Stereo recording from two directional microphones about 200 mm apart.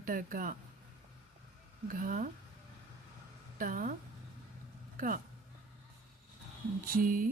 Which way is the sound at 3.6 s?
45° right (ahead or behind).